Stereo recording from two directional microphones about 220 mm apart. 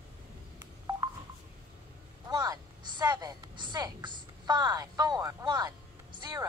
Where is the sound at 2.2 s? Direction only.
15° right (ahead or behind).